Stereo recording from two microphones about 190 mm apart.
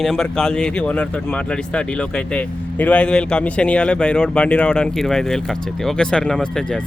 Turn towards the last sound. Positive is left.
turn(degrees=5)  # may be behind; listen again after turning